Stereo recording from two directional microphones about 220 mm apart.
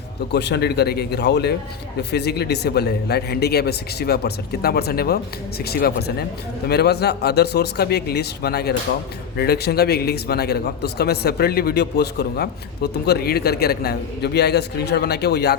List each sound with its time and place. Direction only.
0.3 s a man's voice: 50° left (ahead or behind)